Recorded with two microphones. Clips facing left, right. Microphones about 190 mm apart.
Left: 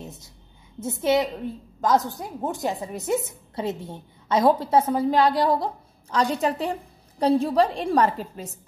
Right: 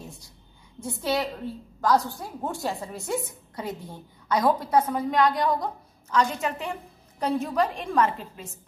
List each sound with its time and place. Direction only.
0.0 s a woman's voice: 20° left (ahead or behind); by 8.5 s 40° left (ahead or behind)